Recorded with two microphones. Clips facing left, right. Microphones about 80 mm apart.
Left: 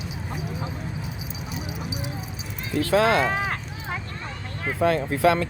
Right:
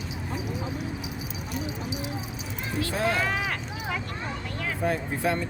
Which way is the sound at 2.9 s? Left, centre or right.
Left.